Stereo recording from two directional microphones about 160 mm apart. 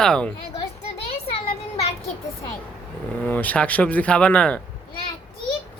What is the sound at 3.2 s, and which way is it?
Speech, 10° left (ahead or behind).